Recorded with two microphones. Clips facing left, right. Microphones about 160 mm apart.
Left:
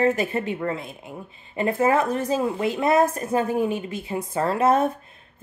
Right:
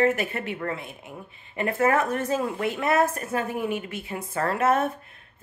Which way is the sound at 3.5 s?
30° left (ahead or behind).